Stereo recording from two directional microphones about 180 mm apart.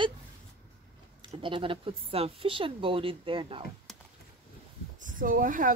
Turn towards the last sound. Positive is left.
turn(degrees=-50)  # may be behind; listen again after turning